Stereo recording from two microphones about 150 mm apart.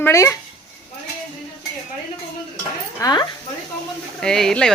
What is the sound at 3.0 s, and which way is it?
Speech, 30° left (ahead or behind).